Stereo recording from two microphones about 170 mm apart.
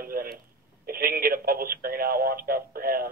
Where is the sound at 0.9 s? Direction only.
60° right (ahead or behind).